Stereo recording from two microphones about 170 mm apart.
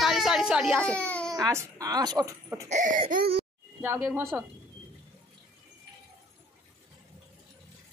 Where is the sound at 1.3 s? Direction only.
20° right (ahead or behind).